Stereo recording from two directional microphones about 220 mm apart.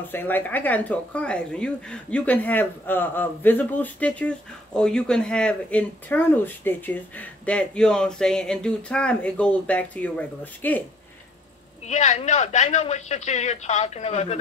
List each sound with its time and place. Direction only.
0.1 s speech: 10° left (ahead or behind)
11.8 s a man's voice: 30° left (ahead or behind)